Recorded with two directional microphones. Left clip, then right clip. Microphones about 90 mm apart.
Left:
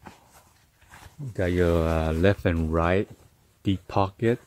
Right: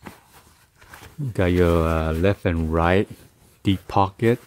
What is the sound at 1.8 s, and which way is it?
Speech, 15° left (ahead or behind).